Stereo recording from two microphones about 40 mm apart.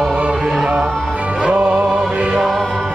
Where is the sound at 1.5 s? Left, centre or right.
Right.